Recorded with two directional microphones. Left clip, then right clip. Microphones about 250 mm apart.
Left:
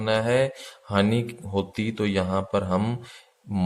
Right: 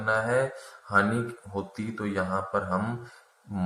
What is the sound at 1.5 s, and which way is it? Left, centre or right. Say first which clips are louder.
Speech: left 8 dB; left.